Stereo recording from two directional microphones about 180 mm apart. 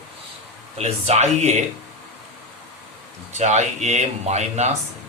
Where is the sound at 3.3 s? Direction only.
40° right (ahead or behind).